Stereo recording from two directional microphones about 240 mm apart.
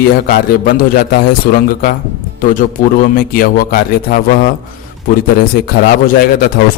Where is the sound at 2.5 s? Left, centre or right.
Left.